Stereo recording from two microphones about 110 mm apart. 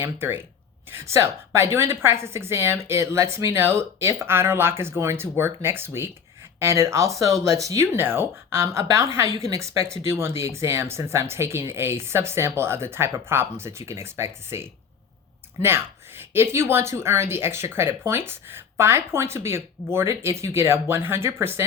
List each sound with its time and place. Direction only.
0.0 s speech: 20° right (ahead or behind)